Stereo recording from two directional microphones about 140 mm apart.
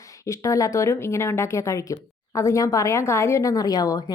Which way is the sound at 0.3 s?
20° left (ahead or behind).